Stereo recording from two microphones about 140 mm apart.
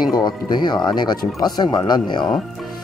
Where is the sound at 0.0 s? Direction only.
30° left (ahead or behind).